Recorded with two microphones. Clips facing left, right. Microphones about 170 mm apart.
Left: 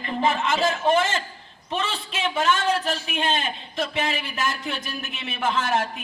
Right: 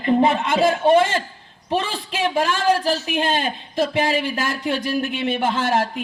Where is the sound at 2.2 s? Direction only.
35° right (ahead or behind).